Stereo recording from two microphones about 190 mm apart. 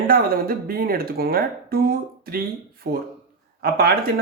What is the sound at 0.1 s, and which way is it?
A man's voice, 50° right (ahead or behind).